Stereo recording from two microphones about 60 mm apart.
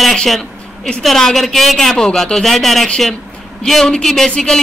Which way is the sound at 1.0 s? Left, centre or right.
Centre.